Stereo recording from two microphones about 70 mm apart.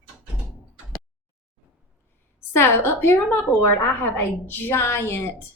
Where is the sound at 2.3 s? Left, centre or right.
Left.